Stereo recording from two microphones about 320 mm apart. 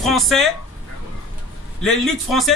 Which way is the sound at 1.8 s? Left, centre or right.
Centre.